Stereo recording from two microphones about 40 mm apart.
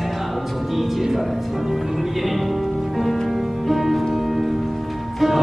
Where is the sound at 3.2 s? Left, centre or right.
Centre.